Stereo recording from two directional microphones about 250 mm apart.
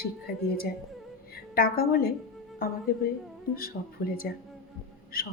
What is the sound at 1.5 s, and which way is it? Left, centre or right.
Speech, left.